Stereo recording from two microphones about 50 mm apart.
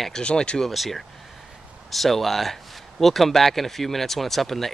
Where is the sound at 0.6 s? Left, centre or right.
Centre.